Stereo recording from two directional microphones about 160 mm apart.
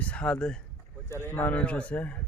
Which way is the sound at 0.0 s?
5° left (ahead or behind).